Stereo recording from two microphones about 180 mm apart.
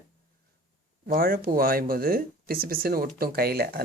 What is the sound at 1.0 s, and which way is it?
Speech, 55° right (ahead or behind).